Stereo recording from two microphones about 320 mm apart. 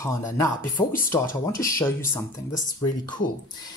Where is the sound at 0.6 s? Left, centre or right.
Left.